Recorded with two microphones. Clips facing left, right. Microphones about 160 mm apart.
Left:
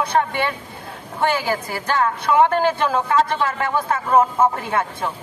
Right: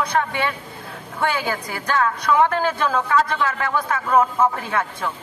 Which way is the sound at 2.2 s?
25° left (ahead or behind).